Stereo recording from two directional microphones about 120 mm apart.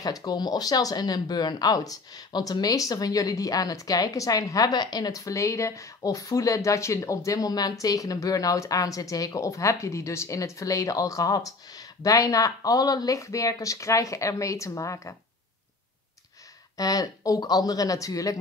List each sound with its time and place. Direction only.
0.0 s speech: 30° left (ahead or behind)
16.7 s speech: 30° left (ahead or behind)